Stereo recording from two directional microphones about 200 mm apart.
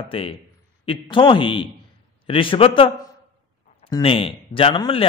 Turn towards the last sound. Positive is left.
turn(degrees=25)  # may be behind; listen again after turning